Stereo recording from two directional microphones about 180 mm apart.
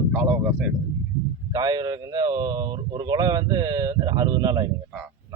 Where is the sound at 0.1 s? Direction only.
5° right (ahead or behind).